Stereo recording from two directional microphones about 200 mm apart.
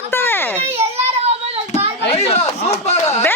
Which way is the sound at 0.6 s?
30° right (ahead or behind).